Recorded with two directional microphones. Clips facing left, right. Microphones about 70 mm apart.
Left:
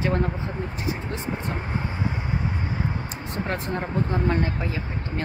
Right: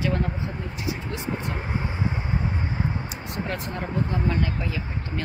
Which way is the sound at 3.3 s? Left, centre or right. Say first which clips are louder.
Left 3 dB; left.